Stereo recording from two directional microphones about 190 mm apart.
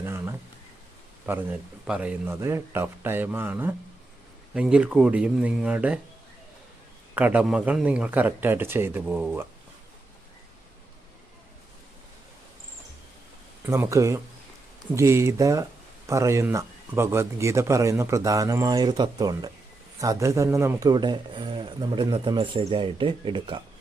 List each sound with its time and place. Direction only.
0.0 s a sound: 15° right (ahead or behind)
1.3 s speech: 10° right (ahead or behind)
7.1 s speech: 10° right (ahead or behind)
13.7 s speech: 15° right (ahead or behind)